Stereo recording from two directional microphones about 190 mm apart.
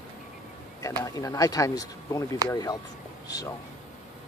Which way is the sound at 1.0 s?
20° left (ahead or behind).